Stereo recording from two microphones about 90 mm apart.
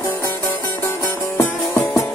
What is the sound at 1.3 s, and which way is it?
Music, 30° left (ahead or behind).